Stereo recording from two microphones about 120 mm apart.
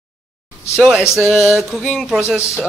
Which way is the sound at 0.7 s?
Centre (ahead or behind).